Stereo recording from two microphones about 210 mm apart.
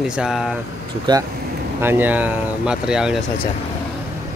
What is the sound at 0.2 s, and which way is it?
Speech, 5° right (ahead or behind).